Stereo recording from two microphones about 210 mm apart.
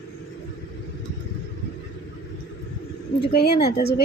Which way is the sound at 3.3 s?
50° left (ahead or behind).